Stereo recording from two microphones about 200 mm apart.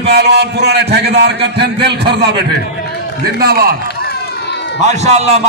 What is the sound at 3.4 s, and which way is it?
Speech, 50° right (ahead or behind).